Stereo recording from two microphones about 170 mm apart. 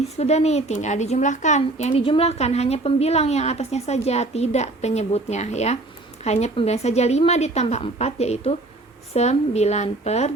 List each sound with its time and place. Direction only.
0.2 s speech: 40° left (ahead or behind)